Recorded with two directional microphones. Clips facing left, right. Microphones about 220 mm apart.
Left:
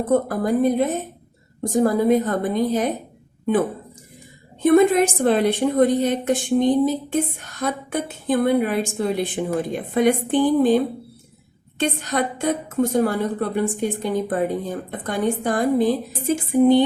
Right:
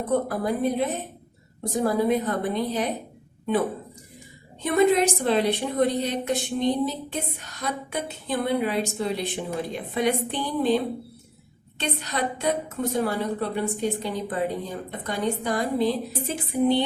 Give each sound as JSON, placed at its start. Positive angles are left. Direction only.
{"t": 0.1, "sound": "a woman's voice", "side_deg": 45}
{"t": 4.6, "sound": "a woman's voice", "side_deg": 50}